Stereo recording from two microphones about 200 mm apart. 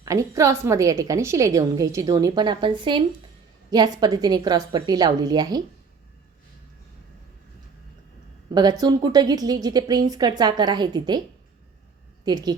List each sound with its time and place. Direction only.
0.0 s a woman's voice: 15° right (ahead or behind)
8.8 s a woman's voice: 20° right (ahead or behind)
12.2 s a woman's voice: 20° right (ahead or behind)